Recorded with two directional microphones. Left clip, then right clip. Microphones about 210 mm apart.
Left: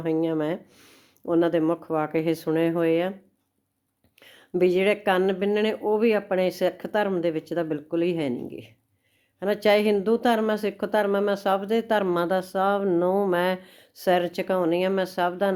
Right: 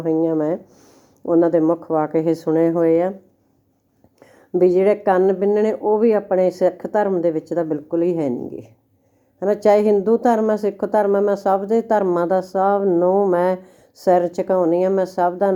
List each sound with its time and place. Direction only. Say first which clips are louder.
0.0 s speech: right 6 dB; 20° left (ahead or behind)
1.8 s speech: right 6 dB; 30° left (ahead or behind)
2.1 s speech: right 6 dB; 15° left (ahead or behind)
2.4 s speech: right 7 dB; 35° left (ahead or behind)
4.5 s speech: right 6 dB; 20° left (ahead or behind)
5.7 s speech: right 6 dB; 35° left (ahead or behind)
6.3 s speech: right 7 dB; 20° left (ahead or behind)
7.5 s speech: right 6 dB; 35° left (ahead or behind)
7.9 s speech: right 6 dB; 20° left (ahead or behind)
13.1 s speech: right 7 dB; 35° left (ahead or behind)
13.3 s speech: right 6 dB; 15° left (ahead or behind)